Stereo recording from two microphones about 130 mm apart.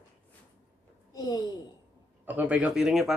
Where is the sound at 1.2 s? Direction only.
30° left (ahead or behind).